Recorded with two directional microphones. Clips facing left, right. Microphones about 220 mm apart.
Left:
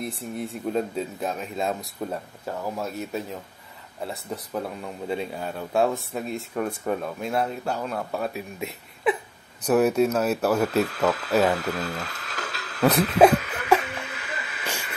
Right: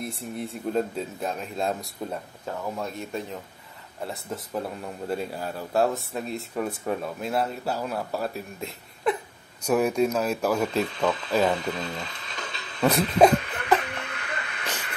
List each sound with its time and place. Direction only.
0.0 s speech: centre (ahead or behind)
9.7 s speech: 5° left (ahead or behind)
12.8 s chuckle: 5° left (ahead or behind)